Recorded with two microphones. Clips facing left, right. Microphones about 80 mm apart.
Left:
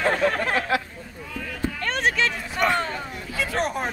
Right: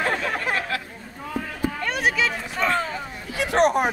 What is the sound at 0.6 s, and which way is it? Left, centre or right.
Chatter, centre.